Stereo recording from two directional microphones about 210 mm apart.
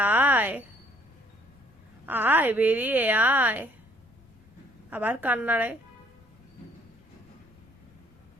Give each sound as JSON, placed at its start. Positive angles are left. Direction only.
{"t": 0.0, "sound": "a sound", "side_deg": -10}
{"t": 2.0, "sound": "a woman's voice", "side_deg": -10}
{"t": 4.9, "sound": "a woman's voice", "side_deg": -10}